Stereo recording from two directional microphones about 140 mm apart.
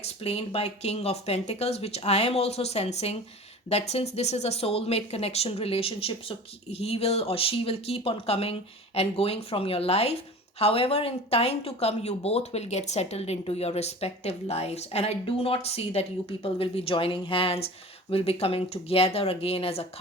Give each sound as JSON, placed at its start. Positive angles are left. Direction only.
{"t": 0.0, "sound": "speech", "side_deg": 50}